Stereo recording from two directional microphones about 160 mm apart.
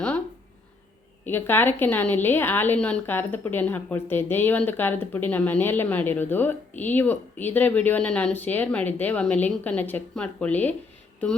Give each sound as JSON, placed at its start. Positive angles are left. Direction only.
{"t": 1.2, "sound": "a woman's voice", "side_deg": 15}